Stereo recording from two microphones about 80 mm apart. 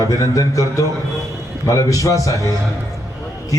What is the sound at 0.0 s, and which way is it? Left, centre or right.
Speech, left.